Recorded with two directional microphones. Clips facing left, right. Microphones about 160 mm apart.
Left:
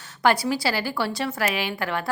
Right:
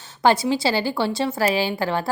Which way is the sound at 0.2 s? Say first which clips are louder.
Right 3 dB; 25° right (ahead or behind).